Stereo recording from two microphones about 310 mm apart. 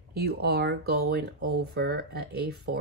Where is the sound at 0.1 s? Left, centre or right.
Right.